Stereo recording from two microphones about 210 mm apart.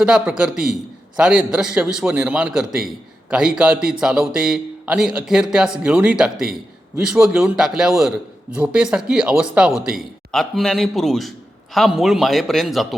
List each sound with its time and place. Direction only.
0.0 s a man's voice: 5° right (ahead or behind)